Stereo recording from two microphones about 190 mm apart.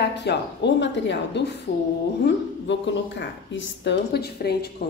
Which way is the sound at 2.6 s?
70° left (ahead or behind).